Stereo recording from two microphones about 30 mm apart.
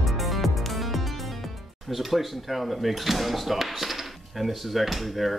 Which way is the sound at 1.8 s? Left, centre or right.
Centre.